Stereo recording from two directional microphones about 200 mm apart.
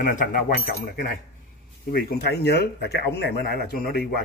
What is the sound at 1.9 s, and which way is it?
Speech, 50° left (ahead or behind).